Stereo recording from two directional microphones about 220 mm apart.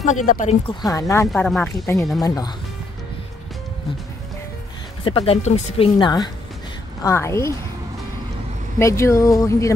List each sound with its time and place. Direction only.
0.0 s speech: 35° left (ahead or behind)
0.9 s speech: 15° left (ahead or behind)
1.3 s speech: 5° left (ahead or behind)
5.0 s speech: 25° left (ahead or behind)
8.7 s speech: 10° left (ahead or behind)